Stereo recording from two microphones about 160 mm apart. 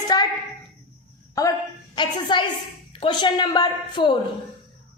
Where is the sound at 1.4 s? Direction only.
20° left (ahead or behind).